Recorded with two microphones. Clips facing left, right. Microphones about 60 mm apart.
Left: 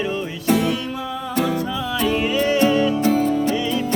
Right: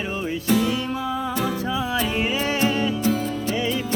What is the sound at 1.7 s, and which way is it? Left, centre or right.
Music, centre.